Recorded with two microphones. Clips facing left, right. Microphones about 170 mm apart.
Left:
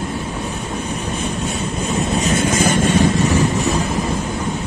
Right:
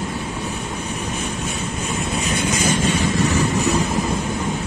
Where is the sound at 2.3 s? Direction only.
50° left (ahead or behind).